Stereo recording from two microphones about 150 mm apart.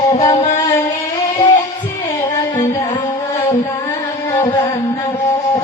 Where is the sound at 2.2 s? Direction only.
20° left (ahead or behind).